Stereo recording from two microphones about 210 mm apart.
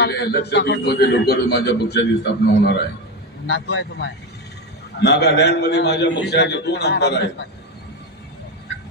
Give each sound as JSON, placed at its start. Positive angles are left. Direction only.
{"t": 0.0, "sound": "a man's voice", "side_deg": 50}